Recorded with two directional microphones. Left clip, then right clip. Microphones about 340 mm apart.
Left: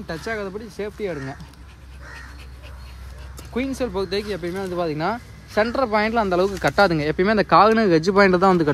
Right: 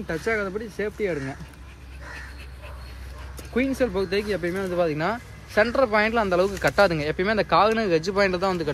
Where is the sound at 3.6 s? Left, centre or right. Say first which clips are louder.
Right 1 dB; left.